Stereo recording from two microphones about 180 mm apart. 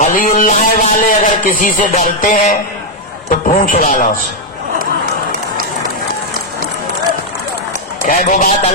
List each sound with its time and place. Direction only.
0.0 s a man's voice: 45° left (ahead or behind)
8.0 s a man's voice: 45° left (ahead or behind)